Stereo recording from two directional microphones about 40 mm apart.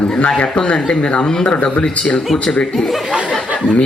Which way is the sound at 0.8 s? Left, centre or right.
Left.